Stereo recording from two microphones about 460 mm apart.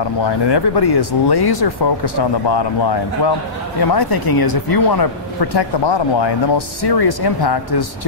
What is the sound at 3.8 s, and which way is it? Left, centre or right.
Speech, left.